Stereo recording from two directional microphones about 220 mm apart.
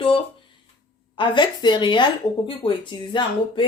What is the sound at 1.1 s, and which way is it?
Speech, 20° left (ahead or behind).